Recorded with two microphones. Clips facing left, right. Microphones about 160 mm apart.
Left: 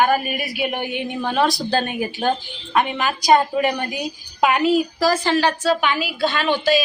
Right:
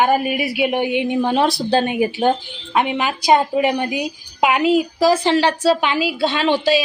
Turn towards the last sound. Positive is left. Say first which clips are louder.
# right 2 dB
turn(degrees=-30)  # may be behind; listen again after turning